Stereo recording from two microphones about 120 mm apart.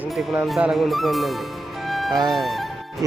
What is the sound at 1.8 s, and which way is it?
Music, centre (ahead or behind).